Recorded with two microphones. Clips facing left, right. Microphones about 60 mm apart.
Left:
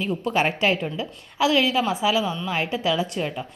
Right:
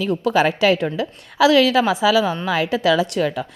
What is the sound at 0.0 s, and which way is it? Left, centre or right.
A woman's voice, right.